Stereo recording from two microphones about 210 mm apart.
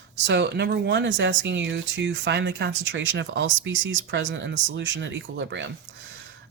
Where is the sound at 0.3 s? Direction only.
55° right (ahead or behind).